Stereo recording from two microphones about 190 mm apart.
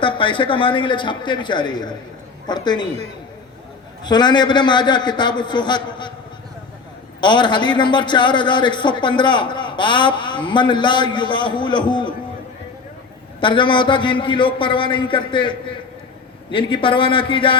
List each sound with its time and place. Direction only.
0.0 s a man's voice: 25° left (ahead or behind)
4.0 s a man's voice: 20° left (ahead or behind)
7.2 s a man's voice: 25° left (ahead or behind)
13.4 s a man's voice: 25° left (ahead or behind)